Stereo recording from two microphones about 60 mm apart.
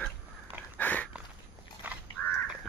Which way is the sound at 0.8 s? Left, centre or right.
Left.